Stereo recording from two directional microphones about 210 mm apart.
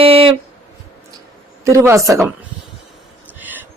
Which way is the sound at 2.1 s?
Centre (ahead or behind).